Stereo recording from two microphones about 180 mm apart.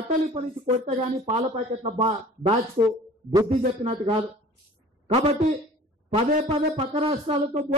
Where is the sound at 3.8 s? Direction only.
30° right (ahead or behind).